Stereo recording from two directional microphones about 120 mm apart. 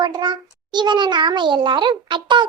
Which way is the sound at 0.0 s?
40° right (ahead or behind).